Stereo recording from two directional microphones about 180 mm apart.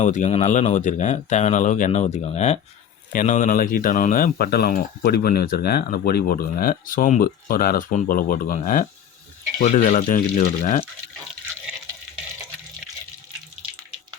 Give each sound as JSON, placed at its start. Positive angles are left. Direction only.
{"t": 0.0, "sound": "speech", "side_deg": 40}